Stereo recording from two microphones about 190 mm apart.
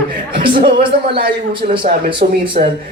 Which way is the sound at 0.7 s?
50° right (ahead or behind).